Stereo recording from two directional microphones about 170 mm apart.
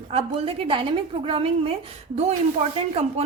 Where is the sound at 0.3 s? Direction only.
35° right (ahead or behind).